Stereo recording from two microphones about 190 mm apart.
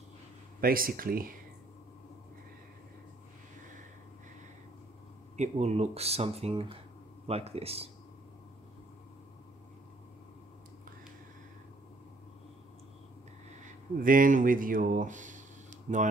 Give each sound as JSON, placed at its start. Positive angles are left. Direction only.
{"t": 0.6, "sound": "speech", "side_deg": -50}
{"t": 5.4, "sound": "speech", "side_deg": -35}
{"t": 13.9, "sound": "speech", "side_deg": -45}